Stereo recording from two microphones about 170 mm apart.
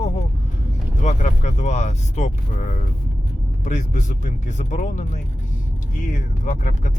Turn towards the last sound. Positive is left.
turn(degrees=45)  # may be behind; listen again after turning